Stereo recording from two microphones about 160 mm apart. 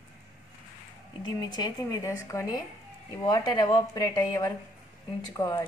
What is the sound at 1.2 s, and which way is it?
Speech, 25° left (ahead or behind).